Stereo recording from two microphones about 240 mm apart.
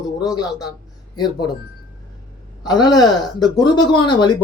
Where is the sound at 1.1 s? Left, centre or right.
Centre.